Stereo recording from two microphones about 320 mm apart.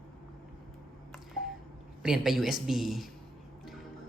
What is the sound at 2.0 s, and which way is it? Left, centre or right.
Speech, centre.